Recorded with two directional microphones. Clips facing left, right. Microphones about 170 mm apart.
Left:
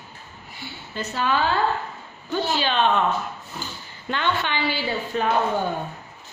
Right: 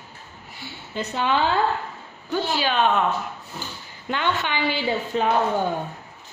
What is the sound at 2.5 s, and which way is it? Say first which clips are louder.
Speech: even; 10° right (ahead or behind).